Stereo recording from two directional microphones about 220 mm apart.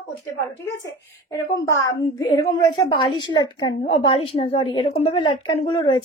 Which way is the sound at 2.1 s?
15° left (ahead or behind).